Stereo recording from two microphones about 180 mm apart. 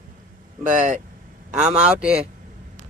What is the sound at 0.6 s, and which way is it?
Speech, 45° right (ahead or behind).